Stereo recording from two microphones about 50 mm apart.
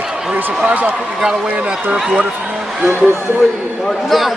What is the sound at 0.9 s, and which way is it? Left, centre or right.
Speech, centre.